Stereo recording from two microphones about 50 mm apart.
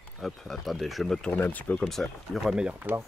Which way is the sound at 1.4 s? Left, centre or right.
Left.